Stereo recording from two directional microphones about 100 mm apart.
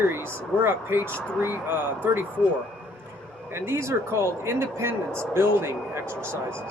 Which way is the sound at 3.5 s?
25° right (ahead or behind).